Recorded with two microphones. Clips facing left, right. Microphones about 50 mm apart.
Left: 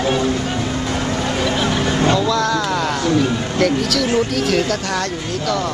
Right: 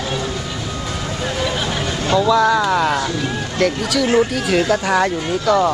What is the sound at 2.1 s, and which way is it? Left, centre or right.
Speech, centre.